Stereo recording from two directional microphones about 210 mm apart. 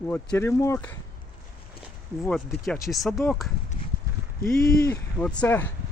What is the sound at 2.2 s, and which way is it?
Speech, centre (ahead or behind).